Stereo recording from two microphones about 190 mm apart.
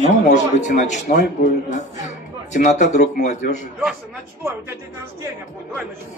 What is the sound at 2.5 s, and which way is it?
Speech, 40° left (ahead or behind).